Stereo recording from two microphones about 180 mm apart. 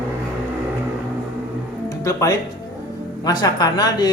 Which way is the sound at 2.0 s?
15° left (ahead or behind).